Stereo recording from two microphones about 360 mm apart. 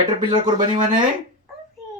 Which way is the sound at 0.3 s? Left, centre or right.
Centre.